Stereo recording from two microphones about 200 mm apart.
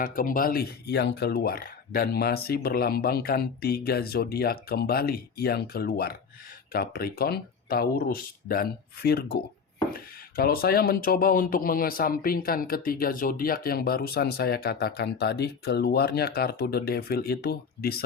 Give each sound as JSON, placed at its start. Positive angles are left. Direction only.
{"t": 0.0, "sound": "speech", "side_deg": 45}